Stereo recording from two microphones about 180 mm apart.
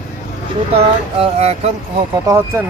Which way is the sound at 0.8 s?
35° right (ahead or behind).